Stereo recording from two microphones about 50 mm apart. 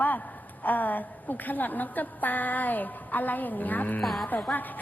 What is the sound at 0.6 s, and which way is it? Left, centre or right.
A woman's voice, left.